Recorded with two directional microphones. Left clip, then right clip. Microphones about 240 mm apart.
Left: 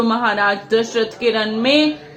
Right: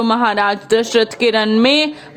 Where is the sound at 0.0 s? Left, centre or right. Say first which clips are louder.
Right 2 dB; right.